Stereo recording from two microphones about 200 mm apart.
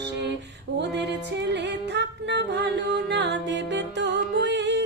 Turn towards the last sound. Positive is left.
turn(degrees=-60)  # may be behind; listen again after turning